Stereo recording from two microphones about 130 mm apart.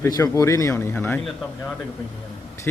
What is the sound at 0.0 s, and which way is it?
A man's voice, 25° left (ahead or behind).